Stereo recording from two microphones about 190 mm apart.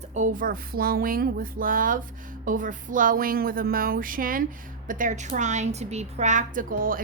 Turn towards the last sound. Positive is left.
turn(degrees=-45)  # may be behind; listen again after turning